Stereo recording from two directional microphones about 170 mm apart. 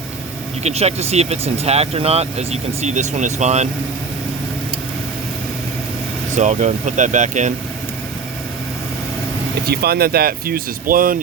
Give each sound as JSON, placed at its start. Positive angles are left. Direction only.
{"t": 0.6, "sound": "speech", "side_deg": -40}
{"t": 6.3, "sound": "speech", "side_deg": -45}
{"t": 9.6, "sound": "speech", "side_deg": -65}